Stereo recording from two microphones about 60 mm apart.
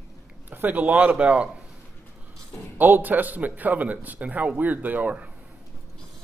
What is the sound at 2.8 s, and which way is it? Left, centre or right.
A man's voice, right.